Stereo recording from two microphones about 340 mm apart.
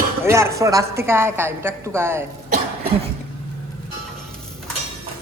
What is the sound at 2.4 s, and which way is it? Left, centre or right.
Cough, right.